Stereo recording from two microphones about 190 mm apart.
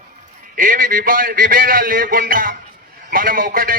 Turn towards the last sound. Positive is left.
turn(degrees=-50)  # may be behind; listen again after turning